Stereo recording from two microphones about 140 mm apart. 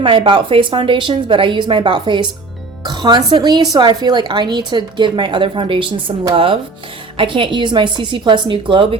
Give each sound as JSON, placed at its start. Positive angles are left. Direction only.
{"t": 0.0, "sound": "speech", "side_deg": -40}